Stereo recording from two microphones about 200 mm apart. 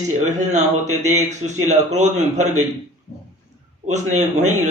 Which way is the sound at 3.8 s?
35° right (ahead or behind).